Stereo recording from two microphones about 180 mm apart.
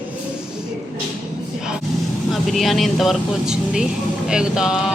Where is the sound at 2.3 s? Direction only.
Centre (ahead or behind).